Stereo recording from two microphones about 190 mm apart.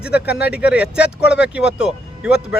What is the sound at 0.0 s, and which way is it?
Speech, 5° right (ahead or behind).